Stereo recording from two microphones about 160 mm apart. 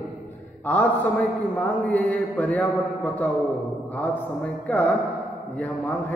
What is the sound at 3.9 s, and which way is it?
A man's voice, 10° left (ahead or behind).